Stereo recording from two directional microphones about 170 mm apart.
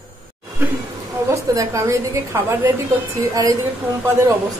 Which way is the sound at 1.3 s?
15° right (ahead or behind).